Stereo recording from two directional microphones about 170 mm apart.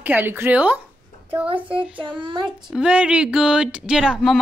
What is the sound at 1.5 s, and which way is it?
Child singing, 30° right (ahead or behind).